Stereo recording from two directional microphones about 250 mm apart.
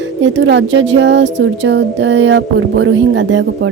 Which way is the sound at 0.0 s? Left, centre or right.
Right.